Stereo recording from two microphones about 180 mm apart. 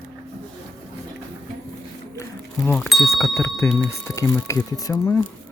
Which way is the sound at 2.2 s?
10° left (ahead or behind).